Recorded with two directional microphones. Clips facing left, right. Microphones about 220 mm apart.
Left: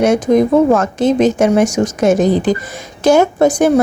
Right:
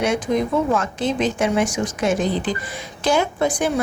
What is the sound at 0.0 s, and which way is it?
A woman's voice, 45° left (ahead or behind).